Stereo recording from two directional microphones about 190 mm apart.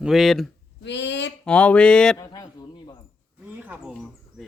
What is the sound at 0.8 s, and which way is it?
Speech, 65° left (ahead or behind).